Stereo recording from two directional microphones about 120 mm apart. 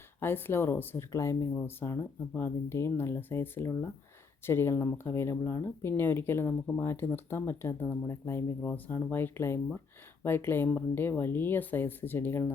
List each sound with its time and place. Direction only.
0.2 s speech: 20° left (ahead or behind)